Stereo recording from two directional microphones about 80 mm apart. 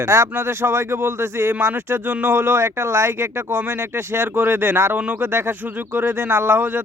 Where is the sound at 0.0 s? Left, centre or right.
Right.